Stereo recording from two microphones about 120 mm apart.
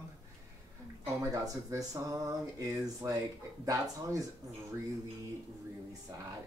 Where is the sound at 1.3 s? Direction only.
30° right (ahead or behind).